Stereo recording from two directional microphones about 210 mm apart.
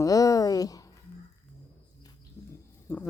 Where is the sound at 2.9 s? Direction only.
10° left (ahead or behind).